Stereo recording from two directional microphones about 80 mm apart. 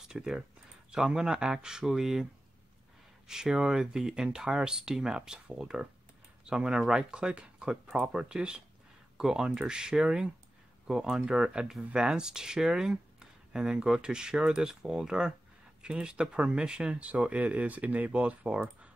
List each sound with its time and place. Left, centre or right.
0.1 s speech: centre
3.3 s speech: centre